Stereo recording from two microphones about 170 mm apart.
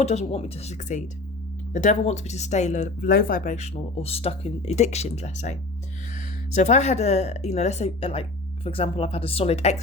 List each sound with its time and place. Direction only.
0.0 s speech: 40° left (ahead or behind)